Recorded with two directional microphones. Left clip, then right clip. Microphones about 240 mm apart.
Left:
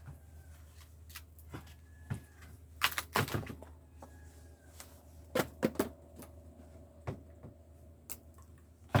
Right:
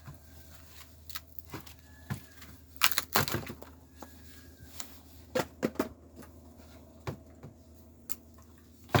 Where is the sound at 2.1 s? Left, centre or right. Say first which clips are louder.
Right 5 dB; right.